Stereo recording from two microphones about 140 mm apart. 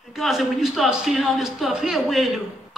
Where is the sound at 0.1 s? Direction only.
Centre (ahead or behind).